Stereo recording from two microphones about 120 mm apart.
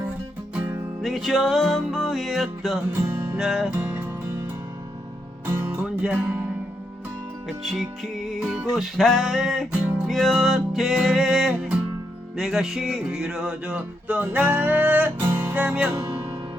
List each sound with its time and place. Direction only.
1.0 s music: centre (ahead or behind)
5.5 s music: 20° right (ahead or behind)
7.4 s music: 5° left (ahead or behind)